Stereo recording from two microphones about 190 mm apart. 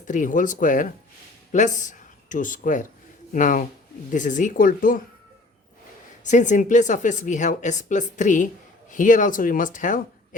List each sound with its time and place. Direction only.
0.0 s speech: 40° left (ahead or behind)
6.2 s a woman's voice: 40° left (ahead or behind)